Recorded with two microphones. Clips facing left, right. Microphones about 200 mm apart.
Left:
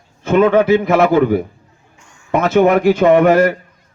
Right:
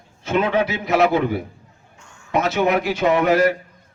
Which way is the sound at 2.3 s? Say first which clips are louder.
Left 7 dB; 50° left (ahead or behind).